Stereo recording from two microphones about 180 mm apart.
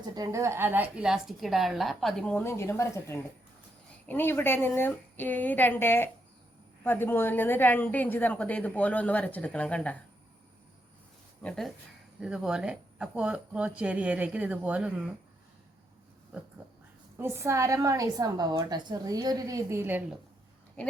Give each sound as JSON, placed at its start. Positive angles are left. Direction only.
{"t": 0.0, "sound": "a woman's voice", "side_deg": -20}
{"t": 11.4, "sound": "a woman's voice", "side_deg": 0}
{"t": 17.2, "sound": "a woman's voice", "side_deg": -15}